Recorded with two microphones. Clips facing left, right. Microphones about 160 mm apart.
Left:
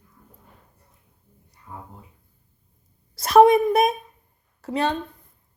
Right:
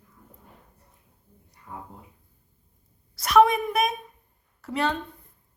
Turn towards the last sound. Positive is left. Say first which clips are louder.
# left 3 dB
turn(degrees=20)  # may be behind; listen again after turning